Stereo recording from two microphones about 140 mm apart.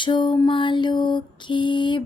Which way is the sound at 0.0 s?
35° left (ahead or behind).